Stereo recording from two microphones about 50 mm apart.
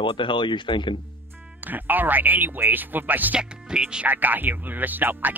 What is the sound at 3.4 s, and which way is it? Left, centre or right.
Speech, centre.